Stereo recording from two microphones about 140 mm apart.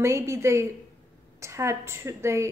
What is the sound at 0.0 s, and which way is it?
A woman's voice, 20° right (ahead or behind).